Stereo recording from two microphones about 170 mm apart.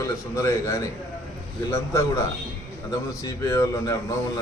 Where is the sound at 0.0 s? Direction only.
15° left (ahead or behind).